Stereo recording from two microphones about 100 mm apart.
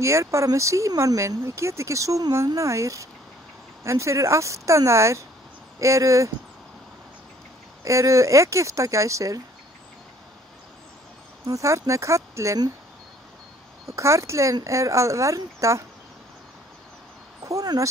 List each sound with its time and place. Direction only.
0.0 s speech: 30° right (ahead or behind)
7.8 s speech: 30° right (ahead or behind)
11.4 s speech: 30° right (ahead or behind)
13.8 s speech: 30° right (ahead or behind)
17.5 s speech: 35° right (ahead or behind)